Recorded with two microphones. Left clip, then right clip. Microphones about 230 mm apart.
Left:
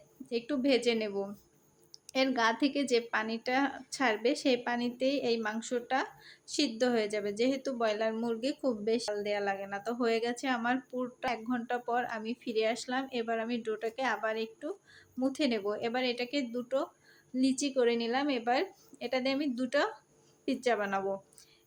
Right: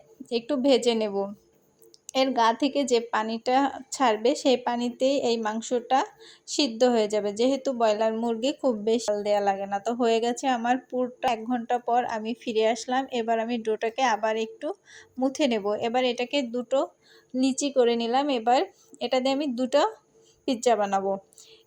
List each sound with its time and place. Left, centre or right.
0.3 s a woman's voice: centre